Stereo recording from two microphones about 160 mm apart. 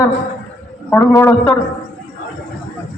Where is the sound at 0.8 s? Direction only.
15° left (ahead or behind).